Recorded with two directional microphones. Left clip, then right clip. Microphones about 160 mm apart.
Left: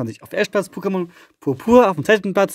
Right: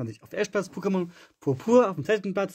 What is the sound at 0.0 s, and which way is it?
Speech, 30° left (ahead or behind).